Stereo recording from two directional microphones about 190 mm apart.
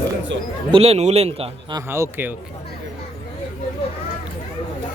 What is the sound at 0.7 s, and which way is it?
Speech, 30° right (ahead or behind).